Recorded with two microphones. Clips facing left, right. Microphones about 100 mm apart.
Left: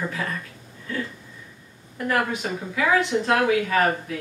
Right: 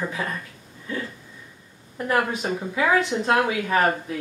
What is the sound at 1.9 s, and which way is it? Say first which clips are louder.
Speech: right 1 dB; 25° right (ahead or behind).